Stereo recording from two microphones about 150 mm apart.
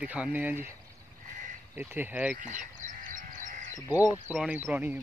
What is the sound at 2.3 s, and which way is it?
Sheep, 60° right (ahead or behind).